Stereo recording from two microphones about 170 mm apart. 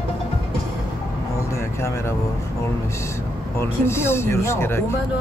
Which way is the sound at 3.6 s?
15° left (ahead or behind).